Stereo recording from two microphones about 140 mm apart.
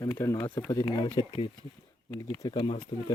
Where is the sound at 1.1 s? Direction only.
35° left (ahead or behind).